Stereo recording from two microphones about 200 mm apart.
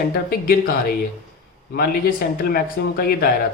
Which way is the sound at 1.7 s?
50° left (ahead or behind).